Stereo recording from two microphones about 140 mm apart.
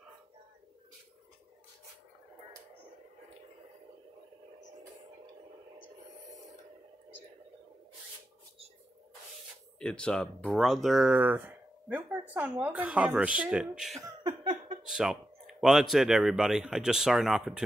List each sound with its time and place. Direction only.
9.8 s speech: 5° left (ahead or behind)
14.2 s a sound: 40° right (ahead or behind)
14.9 s speech: 5° right (ahead or behind)